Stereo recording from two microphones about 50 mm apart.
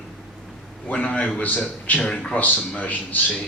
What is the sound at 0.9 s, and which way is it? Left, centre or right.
A man's voice, left.